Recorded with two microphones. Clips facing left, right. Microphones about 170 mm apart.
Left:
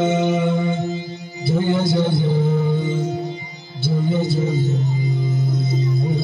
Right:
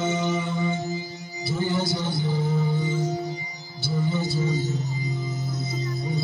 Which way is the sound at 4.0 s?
60° left (ahead or behind).